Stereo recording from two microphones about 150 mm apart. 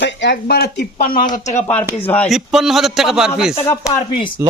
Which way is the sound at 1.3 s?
50° left (ahead or behind).